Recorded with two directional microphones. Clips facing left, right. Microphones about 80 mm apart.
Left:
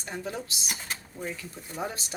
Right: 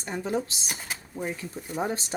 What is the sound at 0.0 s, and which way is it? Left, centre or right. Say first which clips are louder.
Speech: right 6 dB; right.